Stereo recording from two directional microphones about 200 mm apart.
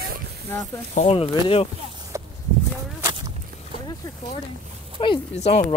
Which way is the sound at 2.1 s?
15° right (ahead or behind).